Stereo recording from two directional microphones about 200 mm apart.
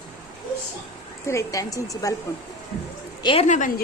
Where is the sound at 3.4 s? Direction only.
40° left (ahead or behind).